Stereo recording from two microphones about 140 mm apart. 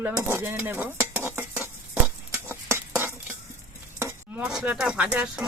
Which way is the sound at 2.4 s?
20° right (ahead or behind).